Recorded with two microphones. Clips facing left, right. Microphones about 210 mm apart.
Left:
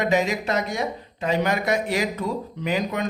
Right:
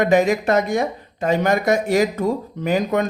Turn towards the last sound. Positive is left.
turn(degrees=-50)  # may be behind; listen again after turning